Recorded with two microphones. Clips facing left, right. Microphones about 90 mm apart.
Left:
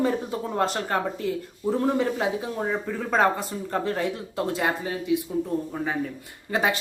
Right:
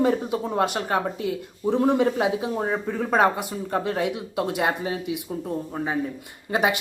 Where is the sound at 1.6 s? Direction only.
25° right (ahead or behind).